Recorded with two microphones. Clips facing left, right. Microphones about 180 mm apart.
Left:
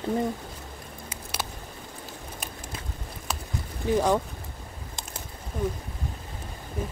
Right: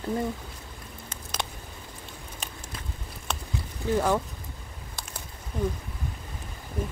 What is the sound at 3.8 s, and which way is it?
Speech, 15° left (ahead or behind).